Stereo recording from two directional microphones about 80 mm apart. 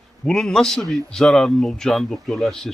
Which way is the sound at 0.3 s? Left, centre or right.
Centre.